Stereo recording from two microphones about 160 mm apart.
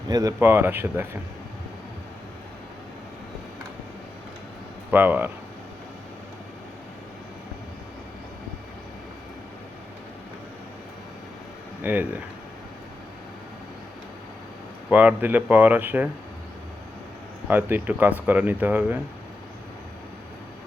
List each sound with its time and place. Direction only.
0.1 s speech: 20° right (ahead or behind)
4.9 s speech: 10° right (ahead or behind)
11.8 s speech: 10° right (ahead or behind)
14.8 s speech: 10° right (ahead or behind)
17.5 s speech: 10° right (ahead or behind)